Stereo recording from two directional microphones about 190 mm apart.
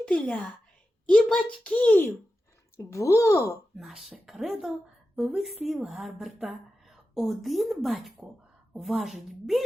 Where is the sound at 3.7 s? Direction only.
Centre (ahead or behind).